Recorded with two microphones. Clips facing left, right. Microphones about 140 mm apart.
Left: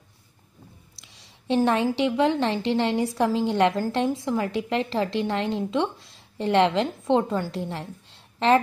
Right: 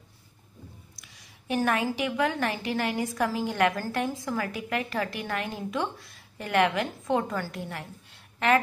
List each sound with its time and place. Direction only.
1.0 s a woman's voice: 25° left (ahead or behind)